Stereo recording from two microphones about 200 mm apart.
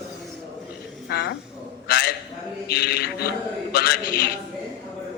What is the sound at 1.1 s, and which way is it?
Speech, 55° left (ahead or behind).